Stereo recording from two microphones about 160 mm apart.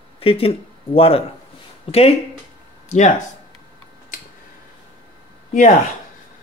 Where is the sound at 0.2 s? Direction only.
35° left (ahead or behind).